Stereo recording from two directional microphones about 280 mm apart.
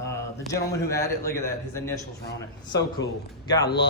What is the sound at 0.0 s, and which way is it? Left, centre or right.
A man's voice, centre.